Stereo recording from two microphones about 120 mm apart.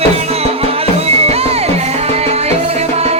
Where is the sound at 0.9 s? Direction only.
60° right (ahead or behind).